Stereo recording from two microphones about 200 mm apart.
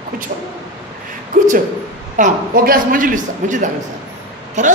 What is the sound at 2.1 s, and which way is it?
A man's voice, 40° right (ahead or behind).